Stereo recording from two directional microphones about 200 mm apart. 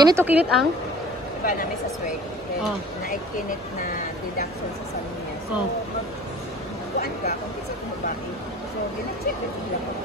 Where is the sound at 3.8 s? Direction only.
40° left (ahead or behind).